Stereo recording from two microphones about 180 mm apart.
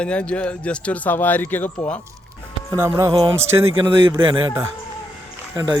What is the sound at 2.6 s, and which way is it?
Speech, 15° right (ahead or behind).